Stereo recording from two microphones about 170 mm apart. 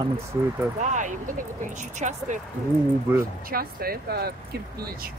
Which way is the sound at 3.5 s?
60° right (ahead or behind).